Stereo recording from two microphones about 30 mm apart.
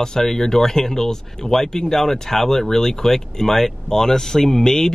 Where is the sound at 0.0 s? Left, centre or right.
Centre.